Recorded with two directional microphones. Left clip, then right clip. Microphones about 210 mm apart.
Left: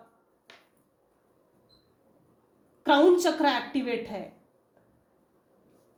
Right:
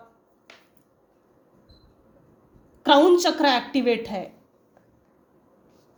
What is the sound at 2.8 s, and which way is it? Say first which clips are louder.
A woman's voice: right 4 dB; 40° right (ahead or behind).